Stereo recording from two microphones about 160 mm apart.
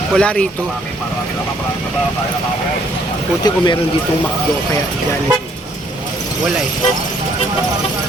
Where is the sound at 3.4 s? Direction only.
25° left (ahead or behind).